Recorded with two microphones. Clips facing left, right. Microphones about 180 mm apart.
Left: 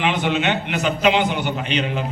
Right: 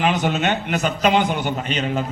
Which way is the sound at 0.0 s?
40° right (ahead or behind).